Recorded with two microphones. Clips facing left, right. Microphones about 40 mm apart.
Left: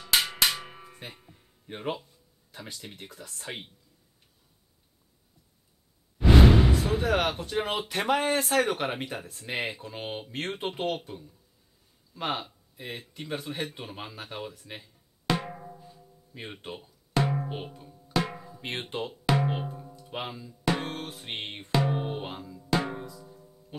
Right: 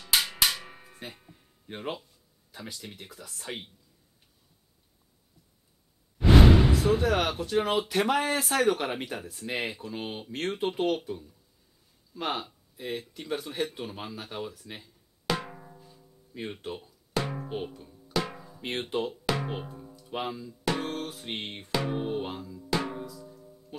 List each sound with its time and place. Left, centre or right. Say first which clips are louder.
0.0 s music: left 1 dB; left
0.8 s music: right 1 dB; centre
1.2 s a sound: even; centre
2.7 s speech: even; centre
7.0 s speech: even; centre
12.1 s a sound: even; centre
17.8 s music: left 4 dB; centre
18.2 s drum: left 3 dB; centre
18.5 s speech: right 3 dB; centre
19.3 s drum: left 5 dB; centre
21.9 s music: right 2 dB; centre
22.8 s drum: left 1 dB; centre
23.7 s speech: left 1 dB; centre